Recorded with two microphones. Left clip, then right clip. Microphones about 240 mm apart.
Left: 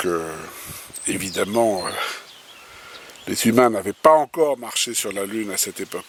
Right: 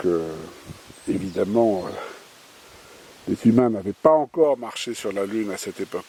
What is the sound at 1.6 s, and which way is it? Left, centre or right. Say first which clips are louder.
Speech: left 1 dB; left.